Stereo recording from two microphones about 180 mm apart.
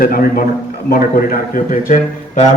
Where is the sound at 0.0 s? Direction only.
55° left (ahead or behind).